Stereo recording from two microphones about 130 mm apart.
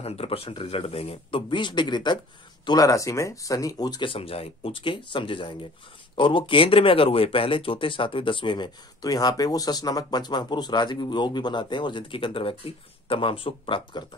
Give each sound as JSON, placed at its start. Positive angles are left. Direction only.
{"t": 0.0, "sound": "speech", "side_deg": 50}
{"t": 4.1, "sound": "speech", "side_deg": 50}